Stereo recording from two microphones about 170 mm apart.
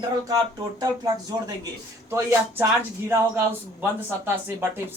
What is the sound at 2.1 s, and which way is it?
Speech, 15° right (ahead or behind).